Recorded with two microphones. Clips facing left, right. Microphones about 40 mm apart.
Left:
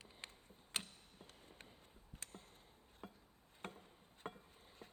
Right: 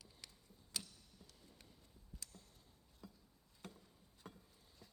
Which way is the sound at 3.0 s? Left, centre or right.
Left.